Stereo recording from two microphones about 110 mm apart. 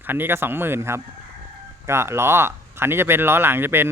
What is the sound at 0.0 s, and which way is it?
Speech, 20° right (ahead or behind).